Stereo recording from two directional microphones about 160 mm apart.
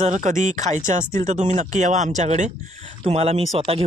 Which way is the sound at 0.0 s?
50° right (ahead or behind).